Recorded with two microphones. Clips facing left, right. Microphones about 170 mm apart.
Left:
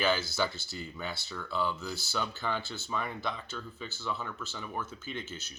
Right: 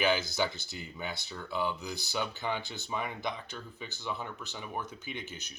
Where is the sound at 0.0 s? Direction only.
15° right (ahead or behind).